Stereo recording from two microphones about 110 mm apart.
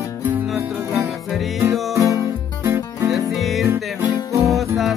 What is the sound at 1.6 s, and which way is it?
Music, 30° right (ahead or behind).